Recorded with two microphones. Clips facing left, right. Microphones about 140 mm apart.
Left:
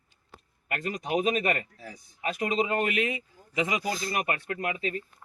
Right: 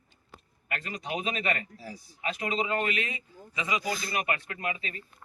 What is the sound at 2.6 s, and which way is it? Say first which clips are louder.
Speech: left 3 dB; 50° left (ahead or behind).